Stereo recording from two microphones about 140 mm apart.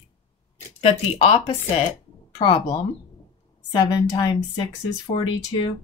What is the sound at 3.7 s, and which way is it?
Speech, 25° left (ahead or behind).